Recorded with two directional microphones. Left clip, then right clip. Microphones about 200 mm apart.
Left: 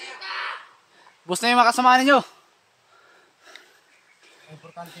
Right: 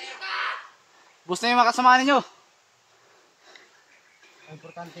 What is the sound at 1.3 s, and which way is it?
A man's voice, 60° left (ahead or behind).